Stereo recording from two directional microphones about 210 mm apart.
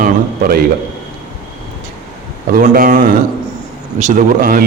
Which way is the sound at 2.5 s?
40° right (ahead or behind).